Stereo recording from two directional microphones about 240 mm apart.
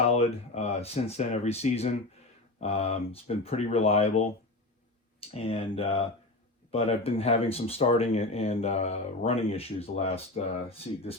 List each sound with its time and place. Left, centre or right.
0.1 s speech: left
5.3 s speech: left